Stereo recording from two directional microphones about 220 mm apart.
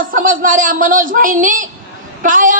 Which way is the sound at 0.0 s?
40° right (ahead or behind).